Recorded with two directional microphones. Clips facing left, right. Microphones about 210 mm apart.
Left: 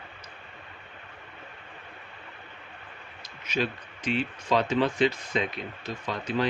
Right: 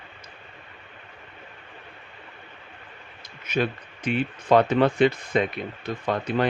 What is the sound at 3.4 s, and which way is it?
Speech, 55° right (ahead or behind).